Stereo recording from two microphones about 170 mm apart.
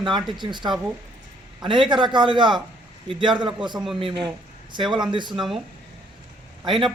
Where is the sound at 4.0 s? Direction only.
30° right (ahead or behind).